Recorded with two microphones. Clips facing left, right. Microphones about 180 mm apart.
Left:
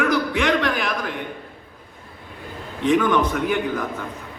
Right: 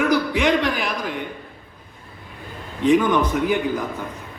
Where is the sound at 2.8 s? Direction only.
15° right (ahead or behind).